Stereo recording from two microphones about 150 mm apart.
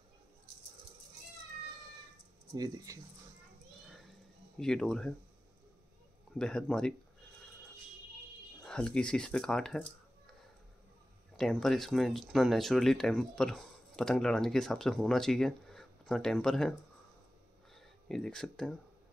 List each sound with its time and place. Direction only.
2.5 s speech: 25° right (ahead or behind)
4.6 s speech: 5° left (ahead or behind)
6.3 s speech: 5° left (ahead or behind)
8.6 s speech: 5° left (ahead or behind)
11.3 s speech: 5° left (ahead or behind)
17.7 s speech: 5° left (ahead or behind)